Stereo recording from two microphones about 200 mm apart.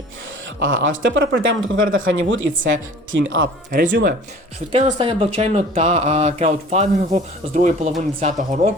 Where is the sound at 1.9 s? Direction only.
80° right.